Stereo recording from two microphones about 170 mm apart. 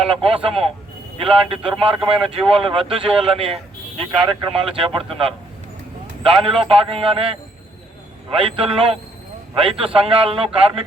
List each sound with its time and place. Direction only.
0.0 s speech: 30° right (ahead or behind)
6.2 s speech: 35° right (ahead or behind)